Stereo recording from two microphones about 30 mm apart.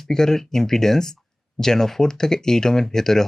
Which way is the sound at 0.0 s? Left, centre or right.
Centre.